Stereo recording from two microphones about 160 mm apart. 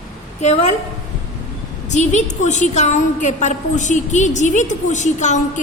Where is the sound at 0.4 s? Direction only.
45° left (ahead or behind).